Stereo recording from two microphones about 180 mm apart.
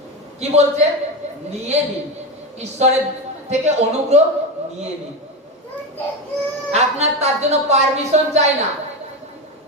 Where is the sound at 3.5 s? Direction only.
40° right (ahead or behind).